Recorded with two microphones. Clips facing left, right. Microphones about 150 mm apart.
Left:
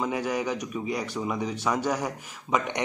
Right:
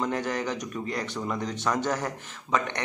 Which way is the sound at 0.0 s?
5° left (ahead or behind).